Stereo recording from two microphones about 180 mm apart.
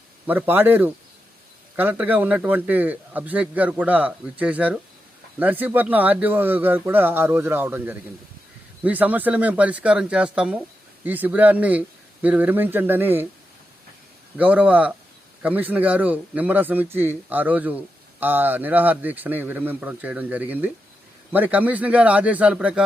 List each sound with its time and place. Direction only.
0.3 s a man's voice: 10° right (ahead or behind)
14.3 s a man's voice: 10° right (ahead or behind)